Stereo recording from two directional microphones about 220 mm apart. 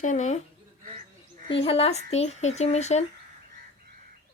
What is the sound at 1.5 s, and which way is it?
Speech, 25° left (ahead or behind).